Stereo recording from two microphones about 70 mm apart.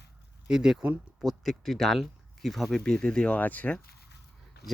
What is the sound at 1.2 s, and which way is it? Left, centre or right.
Speech, centre.